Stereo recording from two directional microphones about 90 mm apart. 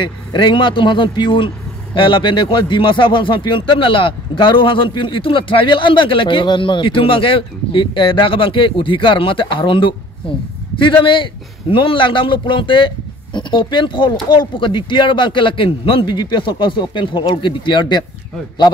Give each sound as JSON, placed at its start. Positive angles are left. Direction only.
{"t": 0.0, "sound": "a man's voice", "side_deg": 60}